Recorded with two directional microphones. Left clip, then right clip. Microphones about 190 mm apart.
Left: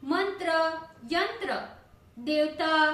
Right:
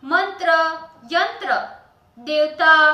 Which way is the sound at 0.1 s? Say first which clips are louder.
Right 10 dB; 25° left (ahead or behind).